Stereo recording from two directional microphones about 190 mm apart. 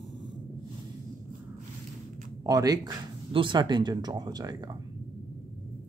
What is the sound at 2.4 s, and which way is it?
Speech, 20° right (ahead or behind).